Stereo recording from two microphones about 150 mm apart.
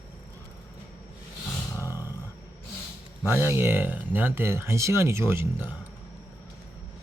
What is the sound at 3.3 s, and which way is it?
Speech, 15° right (ahead or behind).